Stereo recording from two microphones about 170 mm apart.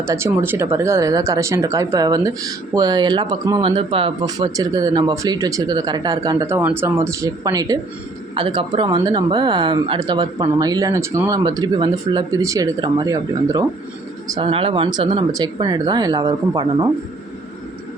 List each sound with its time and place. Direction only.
0.0 s speech: 15° right (ahead or behind)
14.3 s speech: 30° right (ahead or behind)